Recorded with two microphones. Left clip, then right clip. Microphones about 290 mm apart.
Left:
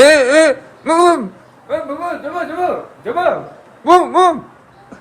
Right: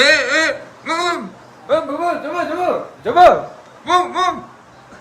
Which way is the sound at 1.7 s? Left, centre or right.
Right.